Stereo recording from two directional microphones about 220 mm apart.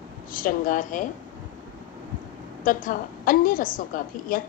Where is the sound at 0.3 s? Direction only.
40° left (ahead or behind).